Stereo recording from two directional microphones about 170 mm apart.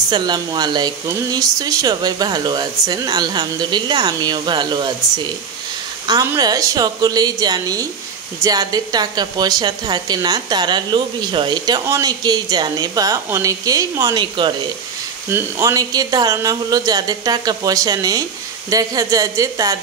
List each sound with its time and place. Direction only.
0.1 s a woman's voice: 25° right (ahead or behind)
6.0 s a woman's voice: 20° right (ahead or behind)